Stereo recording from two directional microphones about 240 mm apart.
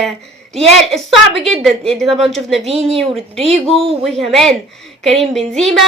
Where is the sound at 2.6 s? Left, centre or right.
Right.